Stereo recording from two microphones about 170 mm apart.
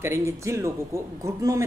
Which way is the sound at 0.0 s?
15° right (ahead or behind).